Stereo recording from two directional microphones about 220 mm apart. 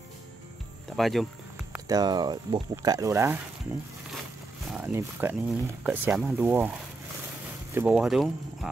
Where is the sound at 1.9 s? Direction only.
20° right (ahead or behind).